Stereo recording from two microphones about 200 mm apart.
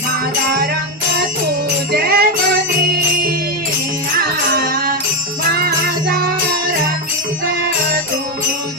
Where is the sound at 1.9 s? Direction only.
50° right (ahead or behind).